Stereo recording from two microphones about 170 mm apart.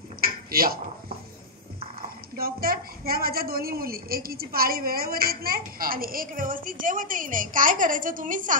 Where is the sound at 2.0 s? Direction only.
60° right (ahead or behind).